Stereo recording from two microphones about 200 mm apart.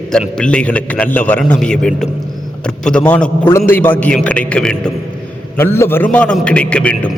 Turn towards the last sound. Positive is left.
turn(degrees=5)  # may be behind; listen again after turning